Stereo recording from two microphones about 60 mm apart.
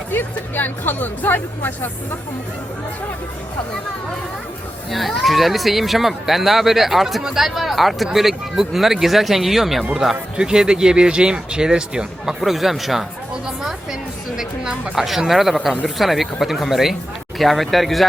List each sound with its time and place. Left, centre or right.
0.1 s speech: left
4.9 s speech: centre
14.3 s speech: centre